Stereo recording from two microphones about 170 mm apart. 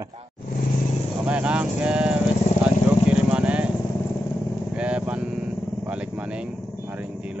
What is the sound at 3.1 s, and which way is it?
Vehicle, 5° right (ahead or behind).